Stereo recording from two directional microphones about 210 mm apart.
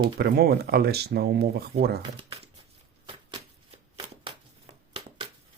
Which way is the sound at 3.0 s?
25° right (ahead or behind).